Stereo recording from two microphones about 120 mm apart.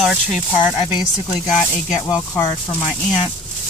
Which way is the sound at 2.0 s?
30° left (ahead or behind).